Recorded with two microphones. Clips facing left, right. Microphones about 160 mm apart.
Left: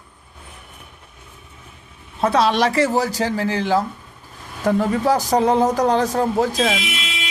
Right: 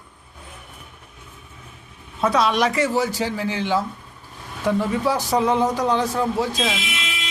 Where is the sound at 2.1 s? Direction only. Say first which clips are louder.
Left 2 dB; 30° left (ahead or behind).